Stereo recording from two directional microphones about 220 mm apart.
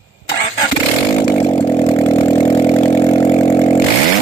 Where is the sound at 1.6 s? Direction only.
15° left (ahead or behind).